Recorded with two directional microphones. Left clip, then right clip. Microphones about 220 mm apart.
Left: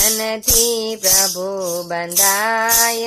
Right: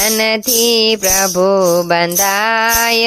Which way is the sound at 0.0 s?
30° right (ahead or behind).